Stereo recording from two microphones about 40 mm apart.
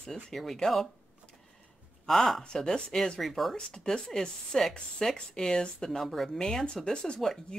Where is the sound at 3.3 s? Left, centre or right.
Centre.